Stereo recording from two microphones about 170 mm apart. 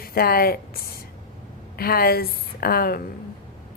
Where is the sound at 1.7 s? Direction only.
60° left (ahead or behind).